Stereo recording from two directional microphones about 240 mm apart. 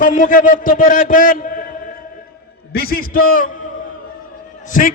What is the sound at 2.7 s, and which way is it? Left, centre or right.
Speech, left.